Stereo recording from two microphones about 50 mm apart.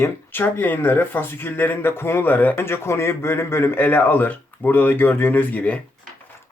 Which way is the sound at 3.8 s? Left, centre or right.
Left.